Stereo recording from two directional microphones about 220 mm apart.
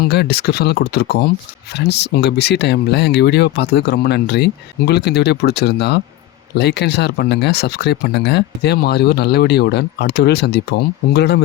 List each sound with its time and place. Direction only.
0.0 s speech: 45° left (ahead or behind)